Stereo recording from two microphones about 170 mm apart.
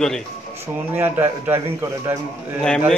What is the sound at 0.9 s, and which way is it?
A man's voice, 10° right (ahead or behind).